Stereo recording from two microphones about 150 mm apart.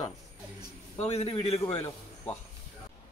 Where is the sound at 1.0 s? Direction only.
45° left (ahead or behind).